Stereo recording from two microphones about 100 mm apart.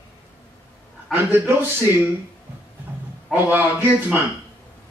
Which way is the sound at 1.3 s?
20° right (ahead or behind).